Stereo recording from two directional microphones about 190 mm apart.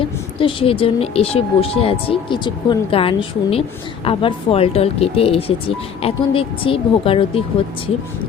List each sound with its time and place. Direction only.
0.3 s speech: 30° left (ahead or behind)